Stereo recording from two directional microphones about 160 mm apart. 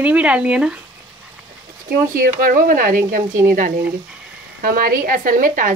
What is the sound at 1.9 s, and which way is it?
A woman's voice, 60° right (ahead or behind).